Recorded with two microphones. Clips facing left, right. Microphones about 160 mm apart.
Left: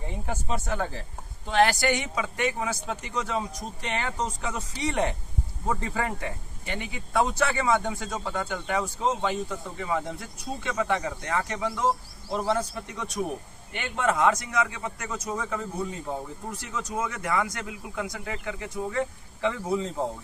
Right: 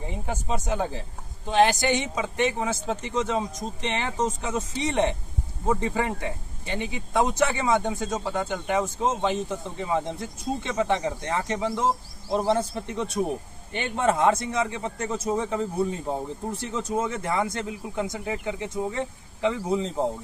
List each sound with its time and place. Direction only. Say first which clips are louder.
0.1 s a man's voice: right 2 dB; 15° right (ahead or behind)